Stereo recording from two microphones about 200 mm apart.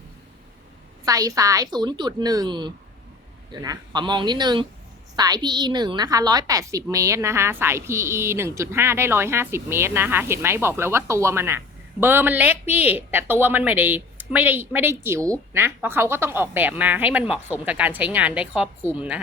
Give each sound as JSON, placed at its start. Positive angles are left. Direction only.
{"t": 1.0, "sound": "a woman's voice", "side_deg": -15}